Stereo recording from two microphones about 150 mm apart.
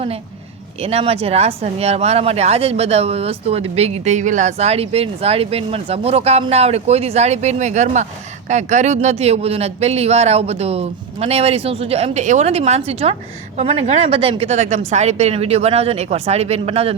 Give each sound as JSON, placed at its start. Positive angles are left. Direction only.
{"t": 0.8, "sound": "speech", "side_deg": -40}